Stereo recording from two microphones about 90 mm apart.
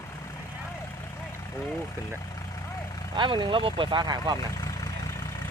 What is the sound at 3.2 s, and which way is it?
Speech, 60° right (ahead or behind).